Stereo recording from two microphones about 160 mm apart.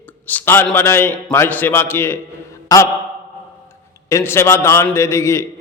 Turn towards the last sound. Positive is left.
turn(degrees=15)  # may be behind; listen again after turning